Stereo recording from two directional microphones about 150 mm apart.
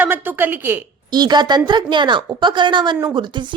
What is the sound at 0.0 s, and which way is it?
Speech, 15° right (ahead or behind).